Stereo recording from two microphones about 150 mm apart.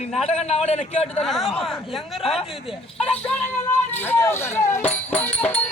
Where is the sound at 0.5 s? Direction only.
45° left (ahead or behind).